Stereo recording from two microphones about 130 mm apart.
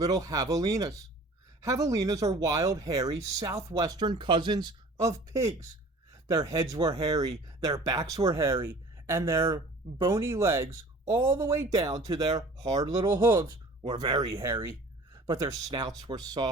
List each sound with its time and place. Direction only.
0.0 s speech: 25° right (ahead or behind)
14.6 s a sound: 25° right (ahead or behind)
15.7 s speech: 30° right (ahead or behind)